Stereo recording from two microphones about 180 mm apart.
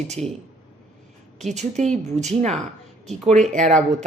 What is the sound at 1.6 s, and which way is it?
Speech, 40° right (ahead or behind).